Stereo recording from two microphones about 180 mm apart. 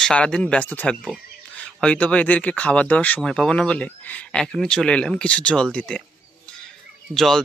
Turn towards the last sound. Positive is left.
turn(degrees=0)  # may be behind; listen again after turning